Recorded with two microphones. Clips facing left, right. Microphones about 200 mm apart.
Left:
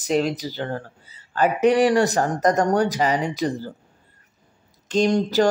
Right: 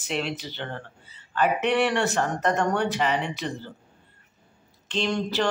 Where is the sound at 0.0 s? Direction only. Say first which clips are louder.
Left 8 dB; 40° left (ahead or behind).